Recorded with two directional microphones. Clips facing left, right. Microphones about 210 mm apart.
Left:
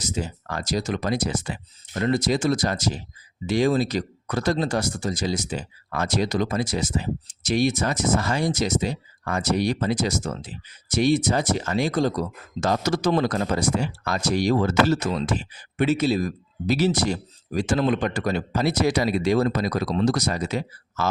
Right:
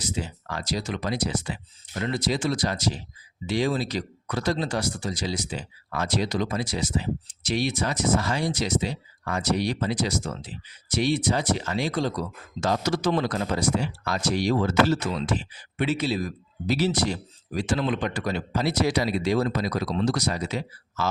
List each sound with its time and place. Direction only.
0.0 s speech: 45° left (ahead or behind)